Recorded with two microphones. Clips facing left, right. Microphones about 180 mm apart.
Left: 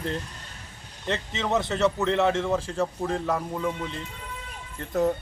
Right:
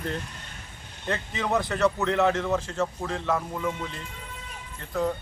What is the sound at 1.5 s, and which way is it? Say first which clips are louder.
A man's voice: even; 25° left (ahead or behind).